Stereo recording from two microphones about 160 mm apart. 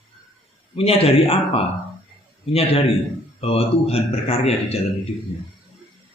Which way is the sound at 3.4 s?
40° left (ahead or behind).